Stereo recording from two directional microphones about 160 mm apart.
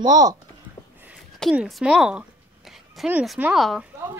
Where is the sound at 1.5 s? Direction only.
5° right (ahead or behind).